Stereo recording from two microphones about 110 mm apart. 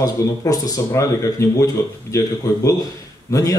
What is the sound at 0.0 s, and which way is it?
Speech, 35° left (ahead or behind).